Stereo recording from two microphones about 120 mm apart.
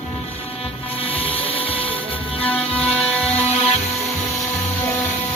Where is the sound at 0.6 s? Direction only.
50° left (ahead or behind).